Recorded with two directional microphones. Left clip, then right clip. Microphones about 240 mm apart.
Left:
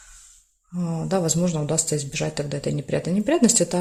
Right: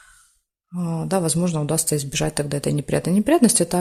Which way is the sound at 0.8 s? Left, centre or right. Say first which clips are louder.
Right 1 dB; centre.